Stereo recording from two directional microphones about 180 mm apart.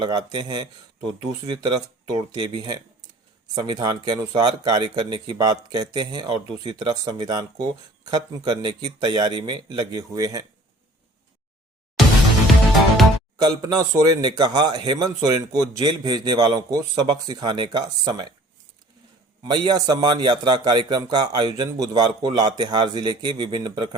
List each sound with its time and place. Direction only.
0.0 s a man's voice: 25° right (ahead or behind)
13.4 s a man's voice: 20° right (ahead or behind)
19.5 s a man's voice: 25° right (ahead or behind)